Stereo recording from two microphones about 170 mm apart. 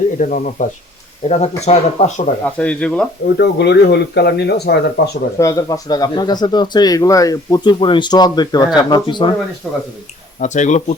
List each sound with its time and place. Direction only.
0.2 s speech: 50° left (ahead or behind)
2.6 s speech: 5° left (ahead or behind)
3.3 s speech: 75° left (ahead or behind)
5.4 s speech: 20° left (ahead or behind)
10.4 s speech: 45° left (ahead or behind)